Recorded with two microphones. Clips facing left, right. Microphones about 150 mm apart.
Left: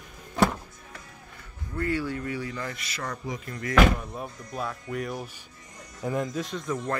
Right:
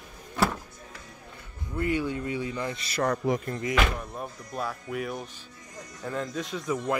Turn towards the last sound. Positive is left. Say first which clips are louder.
# right 1 dB
turn(degrees=-10)  # may be behind; listen again after turning